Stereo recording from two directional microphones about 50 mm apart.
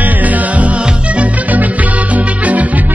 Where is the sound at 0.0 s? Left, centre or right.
Right.